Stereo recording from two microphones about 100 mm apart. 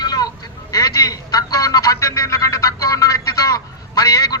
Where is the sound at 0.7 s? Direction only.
35° left (ahead or behind).